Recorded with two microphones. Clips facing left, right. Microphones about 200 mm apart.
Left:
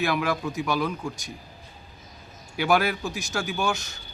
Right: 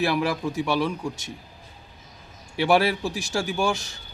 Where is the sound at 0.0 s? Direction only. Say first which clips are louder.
Right 2 dB; 35° right (ahead or behind).